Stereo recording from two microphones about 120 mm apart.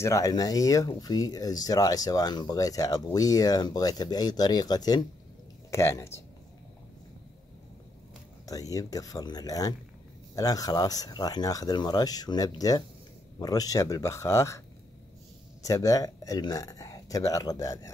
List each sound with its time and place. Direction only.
0.0 s speech: 25° left (ahead or behind)
5.7 s speech: 25° left (ahead or behind)
8.5 s speech: 30° left (ahead or behind)
15.6 s speech: 30° left (ahead or behind)